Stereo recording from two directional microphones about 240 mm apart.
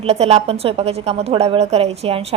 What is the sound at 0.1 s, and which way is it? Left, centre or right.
A woman's voice, right.